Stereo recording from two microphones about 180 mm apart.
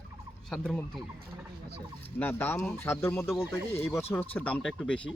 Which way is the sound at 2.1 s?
10° left (ahead or behind).